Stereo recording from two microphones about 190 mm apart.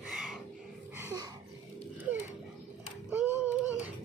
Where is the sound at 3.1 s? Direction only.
10° right (ahead or behind).